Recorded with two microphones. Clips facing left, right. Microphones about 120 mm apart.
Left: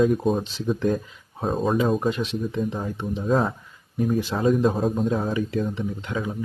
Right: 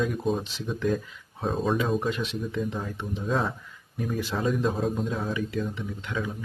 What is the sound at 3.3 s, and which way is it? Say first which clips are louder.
Speech: left 5 dB; 40° left (ahead or behind).